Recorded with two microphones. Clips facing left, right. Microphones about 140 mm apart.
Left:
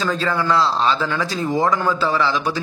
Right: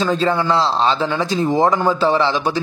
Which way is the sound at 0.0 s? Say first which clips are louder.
Right 4 dB; 25° right (ahead or behind).